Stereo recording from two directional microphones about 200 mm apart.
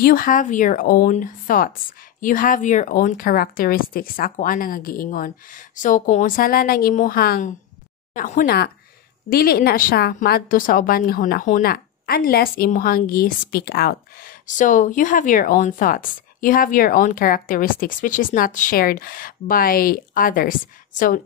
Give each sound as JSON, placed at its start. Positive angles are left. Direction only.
{"t": 0.0, "sound": "a woman's voice", "side_deg": 45}